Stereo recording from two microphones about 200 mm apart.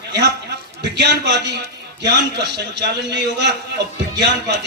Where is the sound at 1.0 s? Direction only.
60° right (ahead or behind).